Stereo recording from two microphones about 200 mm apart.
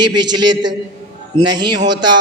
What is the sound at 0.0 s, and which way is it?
A man's voice, 20° right (ahead or behind).